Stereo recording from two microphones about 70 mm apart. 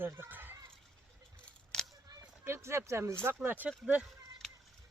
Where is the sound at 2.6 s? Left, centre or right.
Right.